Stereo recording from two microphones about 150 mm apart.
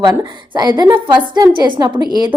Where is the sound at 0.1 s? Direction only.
25° right (ahead or behind).